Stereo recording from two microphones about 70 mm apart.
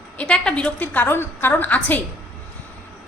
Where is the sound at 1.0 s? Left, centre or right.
Left.